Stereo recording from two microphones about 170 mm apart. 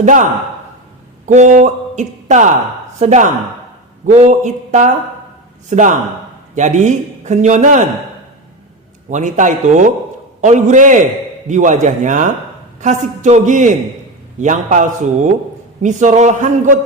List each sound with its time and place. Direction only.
0.0 s a man's voice: 45° right (ahead or behind)
1.3 s a man's voice: 45° right (ahead or behind)
9.0 s a man's voice: 45° right (ahead or behind)